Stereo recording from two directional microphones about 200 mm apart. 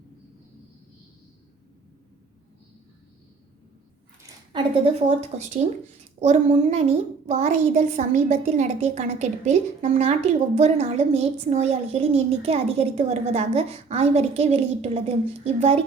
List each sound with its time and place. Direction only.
4.5 s a woman's voice: 30° right (ahead or behind)